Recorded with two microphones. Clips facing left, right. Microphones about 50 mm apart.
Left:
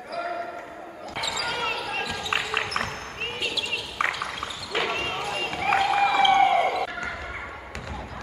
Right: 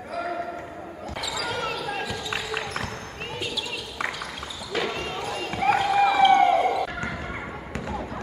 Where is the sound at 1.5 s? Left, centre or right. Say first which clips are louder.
Even; left.